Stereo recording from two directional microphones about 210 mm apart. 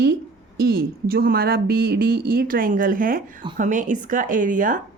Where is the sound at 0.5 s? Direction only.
45° right (ahead or behind).